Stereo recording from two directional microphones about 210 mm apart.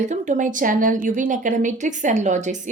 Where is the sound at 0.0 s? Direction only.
35° right (ahead or behind).